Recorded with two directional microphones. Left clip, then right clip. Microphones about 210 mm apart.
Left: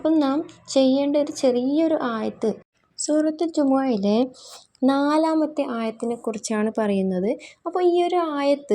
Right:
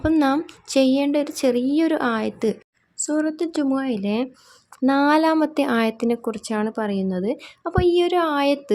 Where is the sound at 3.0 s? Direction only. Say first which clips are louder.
Left 2 dB; 5° right (ahead or behind).